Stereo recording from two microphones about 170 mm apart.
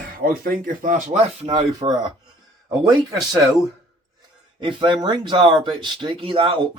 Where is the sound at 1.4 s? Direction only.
30° right (ahead or behind).